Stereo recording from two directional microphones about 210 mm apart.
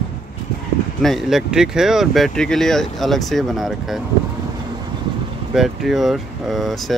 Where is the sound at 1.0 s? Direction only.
Centre (ahead or behind).